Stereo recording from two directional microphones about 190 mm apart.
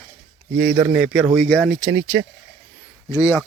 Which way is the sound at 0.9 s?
5° right (ahead or behind).